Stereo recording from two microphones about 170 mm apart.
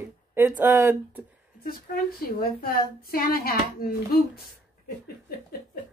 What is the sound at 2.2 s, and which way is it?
A woman's voice, 60° left (ahead or behind).